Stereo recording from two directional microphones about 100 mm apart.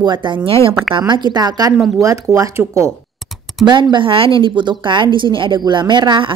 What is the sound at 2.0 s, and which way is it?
Speech, 35° right (ahead or behind).